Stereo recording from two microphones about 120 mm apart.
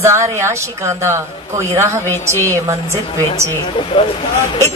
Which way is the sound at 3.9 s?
45° left (ahead or behind).